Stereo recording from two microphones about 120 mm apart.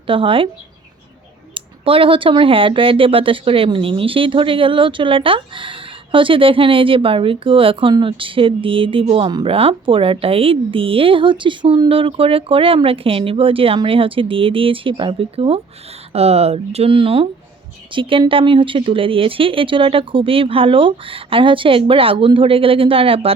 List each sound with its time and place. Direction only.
0.1 s speech: 45° right (ahead or behind)
1.5 s speech: 45° right (ahead or behind)